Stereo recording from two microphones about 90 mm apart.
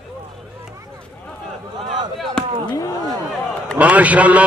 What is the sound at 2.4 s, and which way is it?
Chop, 10° left (ahead or behind).